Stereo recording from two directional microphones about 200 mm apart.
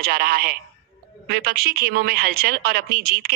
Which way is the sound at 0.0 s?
50° right (ahead or behind).